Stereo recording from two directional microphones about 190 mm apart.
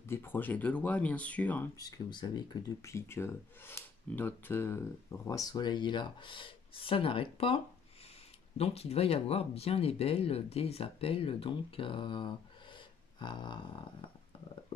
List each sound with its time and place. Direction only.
0.1 s speech: 10° left (ahead or behind)
1.8 s speech: 20° left (ahead or behind)
12.7 s a sound: 25° left (ahead or behind)